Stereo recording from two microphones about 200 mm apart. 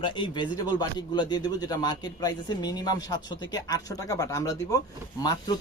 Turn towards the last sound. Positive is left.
turn(degrees=20)  # may be behind; listen again after turning